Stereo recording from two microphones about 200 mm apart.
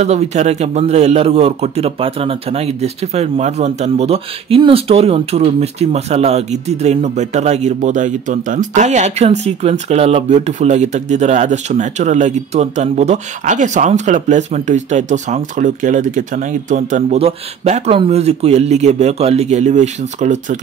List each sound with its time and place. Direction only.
0.0 s a man's voice: 35° right (ahead or behind)